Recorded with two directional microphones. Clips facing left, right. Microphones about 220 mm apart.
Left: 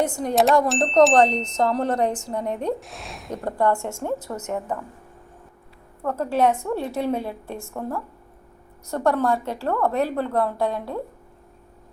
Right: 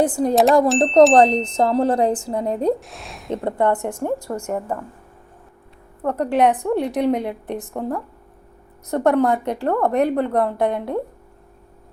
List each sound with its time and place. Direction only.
0.0 s speech: 35° right (ahead or behind)
2.8 s a woman's voice: centre (ahead or behind)
3.4 s a woman's voice: 20° right (ahead or behind)
6.0 s a woman's voice: 20° right (ahead or behind)